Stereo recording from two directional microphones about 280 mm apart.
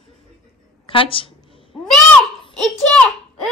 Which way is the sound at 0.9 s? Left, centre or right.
Centre.